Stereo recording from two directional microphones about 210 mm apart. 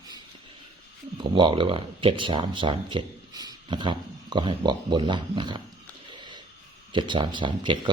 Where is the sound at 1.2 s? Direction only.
25° right (ahead or behind).